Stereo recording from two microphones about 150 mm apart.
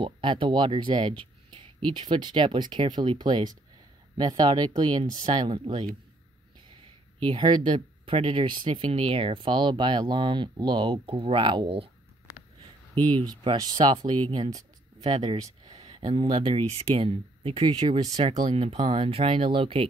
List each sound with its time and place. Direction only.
0.0 s speech: 35° right (ahead or behind)
7.2 s speech: 30° right (ahead or behind)
13.4 s speech: 30° right (ahead or behind)
15.3 s a sound: 25° right (ahead or behind)
15.8 s speech: 35° right (ahead or behind)
18.5 s speech: 45° right (ahead or behind)